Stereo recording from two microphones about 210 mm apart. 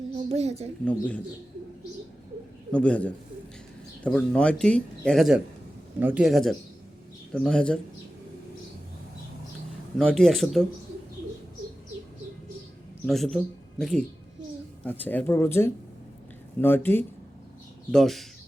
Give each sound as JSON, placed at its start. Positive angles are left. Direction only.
{"t": 0.3, "sound": "a woman's voice", "side_deg": -30}
{"t": 0.9, "sound": "speech", "side_deg": 5}
{"t": 2.7, "sound": "speech", "side_deg": 5}
{"t": 10.0, "sound": "speech", "side_deg": 5}
{"t": 13.1, "sound": "speech", "side_deg": 0}